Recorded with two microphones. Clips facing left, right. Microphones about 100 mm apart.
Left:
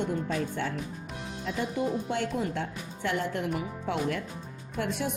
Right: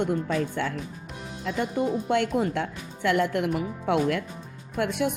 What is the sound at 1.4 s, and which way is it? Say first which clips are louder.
Speech: right 4 dB; 60° right (ahead or behind).